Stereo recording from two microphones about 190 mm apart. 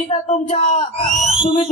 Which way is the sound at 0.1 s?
40° left (ahead or behind).